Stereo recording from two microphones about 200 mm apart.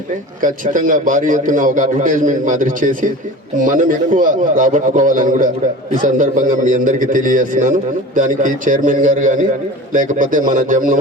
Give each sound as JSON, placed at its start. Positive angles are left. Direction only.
{"t": 0.4, "sound": "a man's voice", "side_deg": -40}